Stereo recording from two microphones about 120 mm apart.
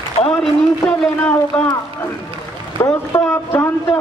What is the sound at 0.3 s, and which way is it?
A man's voice, 10° left (ahead or behind).